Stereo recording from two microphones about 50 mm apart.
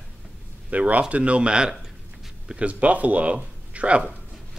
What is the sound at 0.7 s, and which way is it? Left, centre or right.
Speech, right.